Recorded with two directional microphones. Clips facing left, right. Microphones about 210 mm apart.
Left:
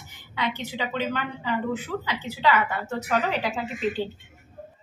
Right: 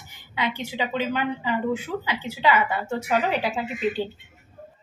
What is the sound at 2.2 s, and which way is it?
Speech, 25° right (ahead or behind).